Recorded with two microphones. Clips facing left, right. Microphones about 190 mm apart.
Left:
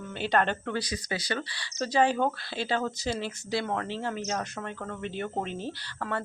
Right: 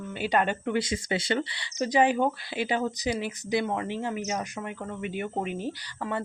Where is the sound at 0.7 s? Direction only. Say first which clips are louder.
Right 5 dB; 25° right (ahead or behind).